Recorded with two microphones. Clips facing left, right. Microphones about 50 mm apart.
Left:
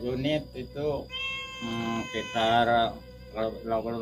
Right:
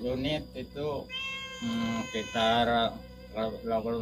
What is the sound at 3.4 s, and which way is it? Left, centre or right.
Mantra, left.